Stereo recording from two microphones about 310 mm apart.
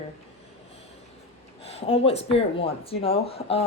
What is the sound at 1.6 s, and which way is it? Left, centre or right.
A woman's voice, centre.